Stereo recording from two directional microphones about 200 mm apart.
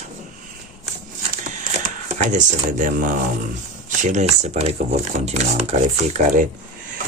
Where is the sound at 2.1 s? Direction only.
40° right (ahead or behind).